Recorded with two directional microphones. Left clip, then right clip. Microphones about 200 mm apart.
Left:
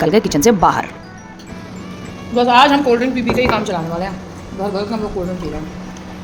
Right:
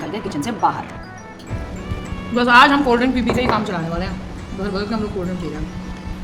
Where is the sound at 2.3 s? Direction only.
30° right (ahead or behind).